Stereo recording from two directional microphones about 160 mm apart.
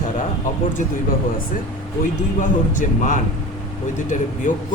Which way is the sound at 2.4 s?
50° left (ahead or behind).